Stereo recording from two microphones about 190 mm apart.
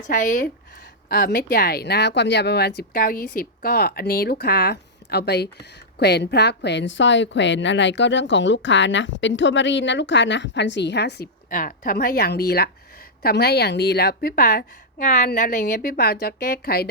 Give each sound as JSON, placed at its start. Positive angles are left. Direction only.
{"t": 0.1, "sound": "a woman's voice", "side_deg": 45}